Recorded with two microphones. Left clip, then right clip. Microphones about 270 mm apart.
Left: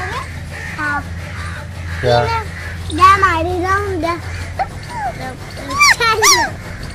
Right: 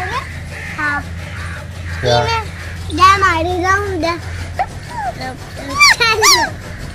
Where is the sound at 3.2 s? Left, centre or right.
Right.